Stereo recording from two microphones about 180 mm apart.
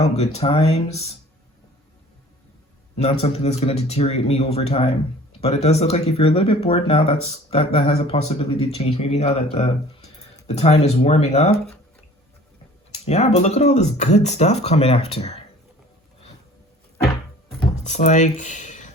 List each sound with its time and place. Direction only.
0.3 s a man's voice: 35° left (ahead or behind)
3.0 s a man's voice: 35° left (ahead or behind)
12.9 s a man's voice: 35° left (ahead or behind)
17.8 s speech: 40° left (ahead or behind)